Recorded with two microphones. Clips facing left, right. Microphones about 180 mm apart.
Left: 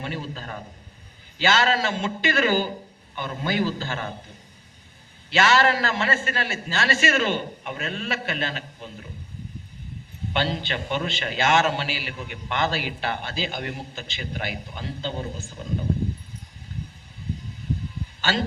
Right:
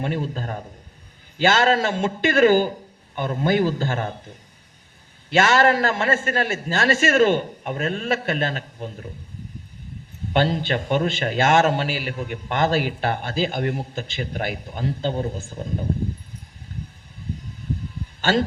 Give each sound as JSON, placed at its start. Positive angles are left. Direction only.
{"t": 0.0, "sound": "a man's voice", "side_deg": -50}
{"t": 5.3, "sound": "a man's voice", "side_deg": -50}
{"t": 10.3, "sound": "a man's voice", "side_deg": -50}
{"t": 18.2, "sound": "a man's voice", "side_deg": -50}